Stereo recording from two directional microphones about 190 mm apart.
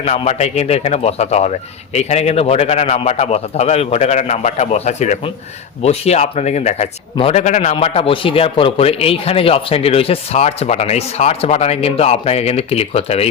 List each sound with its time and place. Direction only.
0.0 s a man's voice: 35° left (ahead or behind)